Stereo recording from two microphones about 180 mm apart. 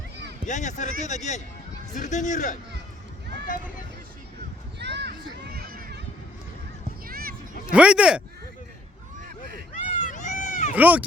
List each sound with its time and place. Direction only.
0.4 s speech: 40° left (ahead or behind)
4.8 s children playing: 70° right (ahead or behind); by 6.0 s 55° right (ahead or behind)
7.1 s a sound: 55° right (ahead or behind)
7.7 s speech: 5° right (ahead or behind)
9.7 s cat: 45° left (ahead or behind)
10.8 s speech: 10° right (ahead or behind)